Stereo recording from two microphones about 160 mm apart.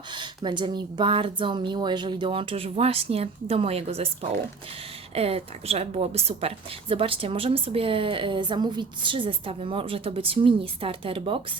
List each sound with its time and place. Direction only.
0.1 s a woman's voice: 30° right (ahead or behind)